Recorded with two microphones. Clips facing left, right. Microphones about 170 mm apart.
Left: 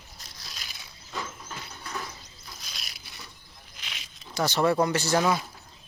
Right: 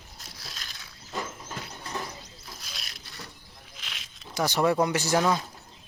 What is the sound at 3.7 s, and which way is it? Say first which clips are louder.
Snake: left 1 dB; centre (ahead or behind).